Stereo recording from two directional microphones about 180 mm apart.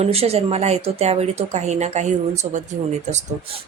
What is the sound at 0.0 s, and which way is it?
Speech, 35° right (ahead or behind).